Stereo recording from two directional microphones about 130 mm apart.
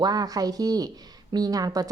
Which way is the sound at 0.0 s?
30° right (ahead or behind).